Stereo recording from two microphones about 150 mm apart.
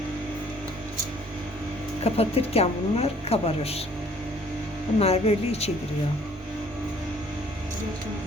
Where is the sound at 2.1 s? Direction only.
40° left (ahead or behind).